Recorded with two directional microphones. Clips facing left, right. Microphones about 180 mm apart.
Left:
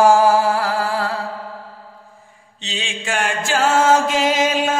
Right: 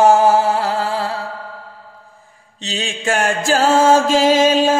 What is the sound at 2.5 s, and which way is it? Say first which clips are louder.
Mantra: right 4 dB; 40° right (ahead or behind).